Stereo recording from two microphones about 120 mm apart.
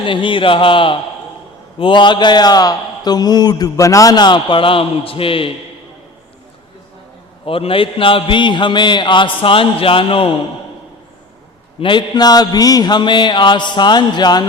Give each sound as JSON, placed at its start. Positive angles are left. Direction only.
{"t": 0.0, "sound": "a man's voice", "side_deg": 45}
{"t": 7.4, "sound": "a man's voice", "side_deg": 50}
{"t": 11.8, "sound": "a man's voice", "side_deg": 40}